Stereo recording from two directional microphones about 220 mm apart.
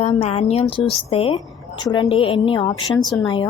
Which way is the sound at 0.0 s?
30° left (ahead or behind).